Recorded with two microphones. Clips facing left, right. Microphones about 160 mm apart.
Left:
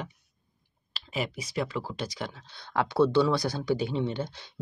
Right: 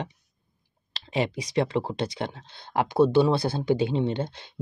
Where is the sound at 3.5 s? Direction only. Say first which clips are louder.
Right 4 dB; 55° right (ahead or behind).